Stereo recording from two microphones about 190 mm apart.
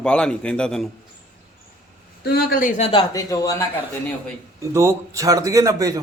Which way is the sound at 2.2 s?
55° left (ahead or behind).